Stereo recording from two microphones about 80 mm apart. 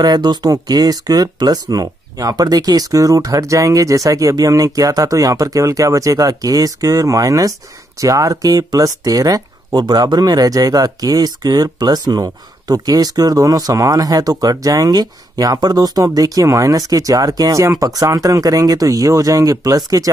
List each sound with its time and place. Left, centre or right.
0.0 s speech: right